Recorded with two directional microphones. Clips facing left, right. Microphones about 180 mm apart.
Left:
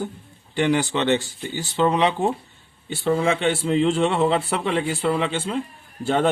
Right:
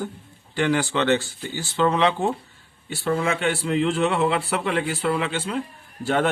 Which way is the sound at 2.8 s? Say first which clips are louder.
Left 3 dB; 30° left (ahead or behind).